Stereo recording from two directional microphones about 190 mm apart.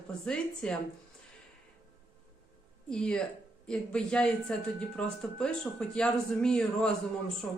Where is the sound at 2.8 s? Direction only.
5° left (ahead or behind).